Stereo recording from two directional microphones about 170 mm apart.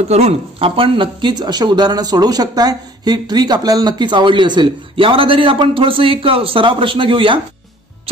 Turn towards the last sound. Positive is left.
turn(degrees=-30)  # may be behind; listen again after turning